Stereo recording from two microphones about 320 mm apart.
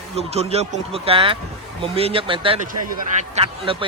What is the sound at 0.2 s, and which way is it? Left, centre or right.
A man's voice, centre.